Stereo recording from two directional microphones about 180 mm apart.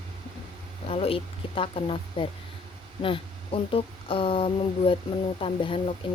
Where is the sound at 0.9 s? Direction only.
30° left (ahead or behind).